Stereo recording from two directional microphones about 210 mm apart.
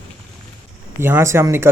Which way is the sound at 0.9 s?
10° right (ahead or behind).